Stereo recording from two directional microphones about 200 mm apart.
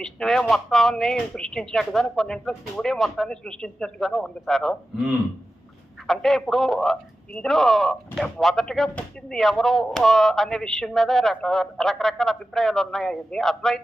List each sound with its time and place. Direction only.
0.0 s a man's voice: centre (ahead or behind)